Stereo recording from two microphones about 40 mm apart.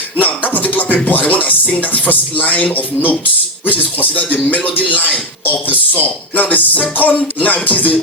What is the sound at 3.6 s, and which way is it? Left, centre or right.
Speech, left.